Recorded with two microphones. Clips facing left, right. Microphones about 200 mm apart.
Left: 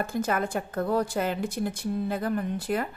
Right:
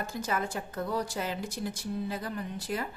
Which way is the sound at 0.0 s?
55° left (ahead or behind).